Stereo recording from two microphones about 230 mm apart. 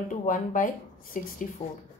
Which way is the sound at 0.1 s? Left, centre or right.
Left.